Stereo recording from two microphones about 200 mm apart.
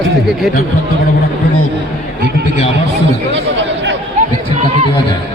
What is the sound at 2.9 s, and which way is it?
Speech, 60° right (ahead or behind).